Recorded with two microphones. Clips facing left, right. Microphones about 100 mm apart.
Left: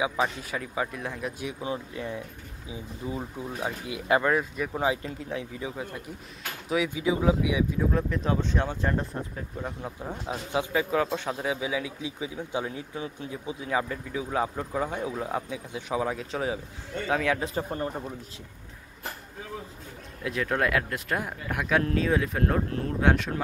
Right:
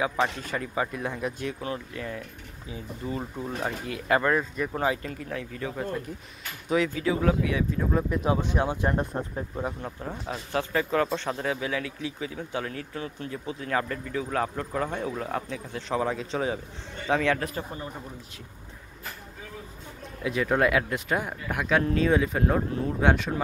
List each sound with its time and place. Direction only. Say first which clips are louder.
0.2 s speech: right 1 dB; 5° left (ahead or behind)
1.4 s speech: even; 15° left (ahead or behind)
2.7 s speech: right 1 dB; 10° left (ahead or behind)
7.8 s speech: right 1 dB; 10° right (ahead or behind)
9.8 s speech: even; 5° left (ahead or behind)
17.6 s speech: left 5 dB; 35° left (ahead or behind)
20.2 s speech: right 3 dB; centre (ahead or behind)